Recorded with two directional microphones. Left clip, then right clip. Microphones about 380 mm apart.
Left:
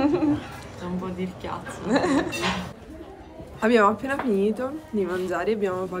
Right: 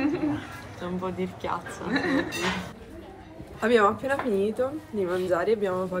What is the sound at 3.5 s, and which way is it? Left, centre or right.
Speech, centre.